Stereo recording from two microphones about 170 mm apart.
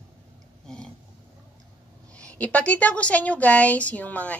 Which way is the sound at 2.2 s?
5° left (ahead or behind).